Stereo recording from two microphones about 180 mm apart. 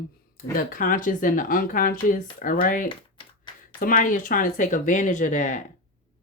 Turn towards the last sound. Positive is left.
turn(degrees=45)  # may be behind; listen again after turning